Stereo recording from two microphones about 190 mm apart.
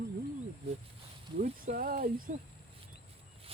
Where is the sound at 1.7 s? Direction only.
50° right (ahead or behind).